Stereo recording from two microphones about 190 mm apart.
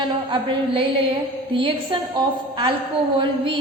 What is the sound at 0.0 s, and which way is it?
A woman's voice, 25° right (ahead or behind).